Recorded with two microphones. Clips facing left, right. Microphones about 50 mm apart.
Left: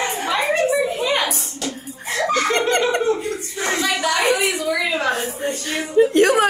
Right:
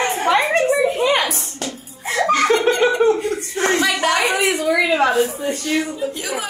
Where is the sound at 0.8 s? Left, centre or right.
Right.